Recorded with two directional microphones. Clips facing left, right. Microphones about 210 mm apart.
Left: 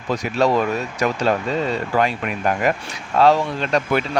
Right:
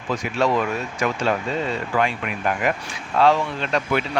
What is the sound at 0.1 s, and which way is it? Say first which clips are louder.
Speech: left 3 dB; 40° left (ahead or behind).